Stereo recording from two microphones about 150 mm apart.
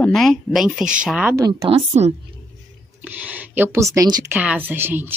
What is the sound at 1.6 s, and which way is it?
Speech, 40° right (ahead or behind).